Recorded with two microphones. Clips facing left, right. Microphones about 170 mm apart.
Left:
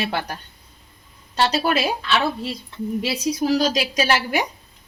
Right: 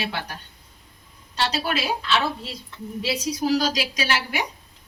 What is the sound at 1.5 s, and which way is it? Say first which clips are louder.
Speech: left 5 dB; 45° left (ahead or behind).